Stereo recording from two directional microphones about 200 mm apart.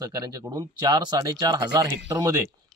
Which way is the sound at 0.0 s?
20° right (ahead or behind).